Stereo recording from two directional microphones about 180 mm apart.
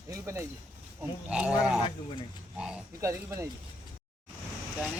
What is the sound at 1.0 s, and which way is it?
Speech, 5° right (ahead or behind).